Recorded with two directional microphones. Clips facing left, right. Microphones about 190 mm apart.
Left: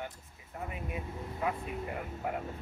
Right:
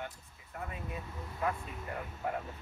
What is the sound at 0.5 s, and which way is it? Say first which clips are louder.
Speech: left 2 dB; 20° left (ahead or behind).